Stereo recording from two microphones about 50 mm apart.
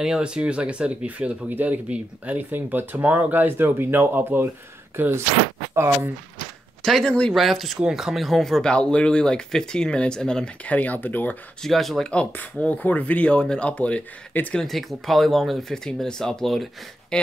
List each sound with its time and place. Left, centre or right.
0.0 s speech: centre; by 2.4 s right
2.5 s speech: right
3.1 s speech: right
3.3 s speech: right
6.8 s speech: centre
7.1 s speech: centre
7.3 s speech: centre
8.7 s speech: left
10.6 s speech: left
11.6 s speech: centre
12.6 s speech: left
14.3 s speech: left
14.7 s speech: centre